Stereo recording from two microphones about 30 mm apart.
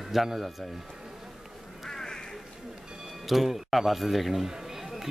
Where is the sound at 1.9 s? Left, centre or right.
Centre.